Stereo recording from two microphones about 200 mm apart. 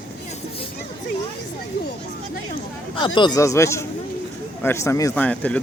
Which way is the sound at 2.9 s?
25° left (ahead or behind).